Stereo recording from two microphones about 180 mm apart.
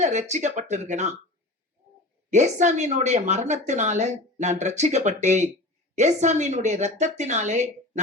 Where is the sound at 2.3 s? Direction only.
40° right (ahead or behind).